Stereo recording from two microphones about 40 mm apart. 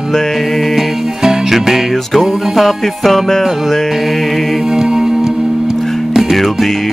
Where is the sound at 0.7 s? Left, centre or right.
Centre.